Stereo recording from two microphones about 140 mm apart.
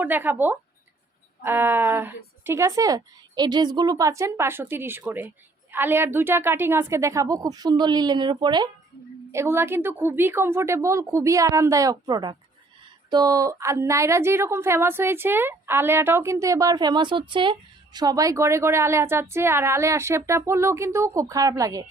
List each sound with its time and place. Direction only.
0.0 s a woman's voice: 15° right (ahead or behind); by 8.7 s 30° right (ahead or behind)
9.3 s a woman's voice: 20° right (ahead or behind)